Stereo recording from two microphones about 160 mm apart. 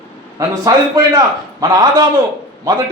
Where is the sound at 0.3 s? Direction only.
20° right (ahead or behind).